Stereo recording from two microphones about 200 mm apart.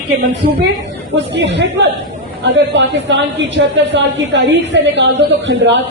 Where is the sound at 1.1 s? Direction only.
60° right (ahead or behind).